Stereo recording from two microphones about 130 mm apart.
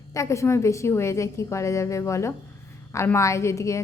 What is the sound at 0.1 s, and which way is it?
A woman's voice, 25° left (ahead or behind).